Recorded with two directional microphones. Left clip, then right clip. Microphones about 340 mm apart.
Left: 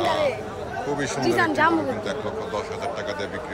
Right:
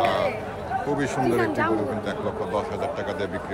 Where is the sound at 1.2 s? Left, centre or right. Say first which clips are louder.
Left 5 dB; left.